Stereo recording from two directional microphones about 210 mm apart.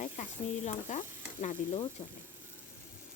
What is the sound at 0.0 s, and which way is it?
Stir, 35° left (ahead or behind).